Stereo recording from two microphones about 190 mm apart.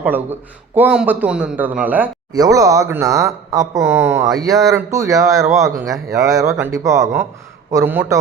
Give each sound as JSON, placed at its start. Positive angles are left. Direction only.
{"t": 0.0, "sound": "speech", "side_deg": -10}